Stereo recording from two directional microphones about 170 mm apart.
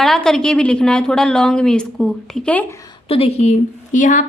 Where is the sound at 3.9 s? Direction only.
50° left (ahead or behind).